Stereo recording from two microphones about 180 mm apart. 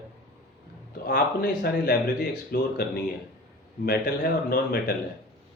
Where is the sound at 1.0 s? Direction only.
60° left (ahead or behind).